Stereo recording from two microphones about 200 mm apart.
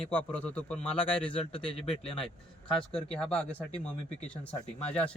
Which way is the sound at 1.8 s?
30° left (ahead or behind).